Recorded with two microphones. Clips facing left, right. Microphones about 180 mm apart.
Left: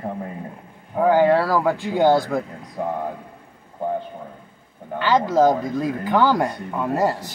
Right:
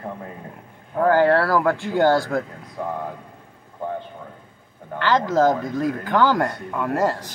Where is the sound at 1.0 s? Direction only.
10° left (ahead or behind).